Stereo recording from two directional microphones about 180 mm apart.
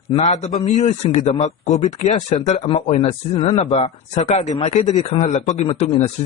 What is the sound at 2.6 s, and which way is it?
Speech, 30° left (ahead or behind).